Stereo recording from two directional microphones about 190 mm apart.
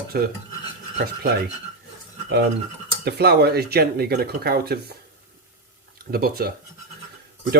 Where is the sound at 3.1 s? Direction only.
60° right (ahead or behind).